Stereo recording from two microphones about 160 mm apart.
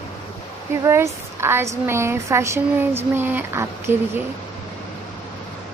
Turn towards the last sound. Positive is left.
turn(degrees=-15)  # may be behind; listen again after turning